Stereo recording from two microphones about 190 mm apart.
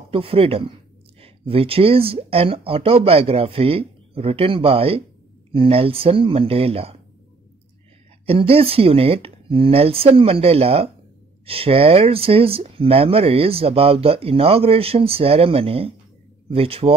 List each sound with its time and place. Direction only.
0.1 s speech: 30° right (ahead or behind)
8.3 s speech: 30° right (ahead or behind)